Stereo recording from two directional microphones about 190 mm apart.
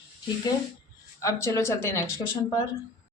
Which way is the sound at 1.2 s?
15° left (ahead or behind).